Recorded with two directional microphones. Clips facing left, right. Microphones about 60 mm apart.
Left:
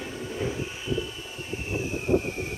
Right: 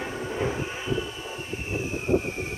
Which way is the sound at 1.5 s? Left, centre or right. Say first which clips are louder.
Left 1 dB; centre.